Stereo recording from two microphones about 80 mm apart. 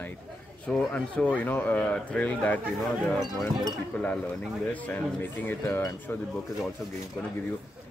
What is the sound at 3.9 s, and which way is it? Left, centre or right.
Speech, centre.